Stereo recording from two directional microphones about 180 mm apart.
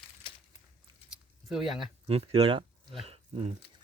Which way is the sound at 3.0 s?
35° right (ahead or behind).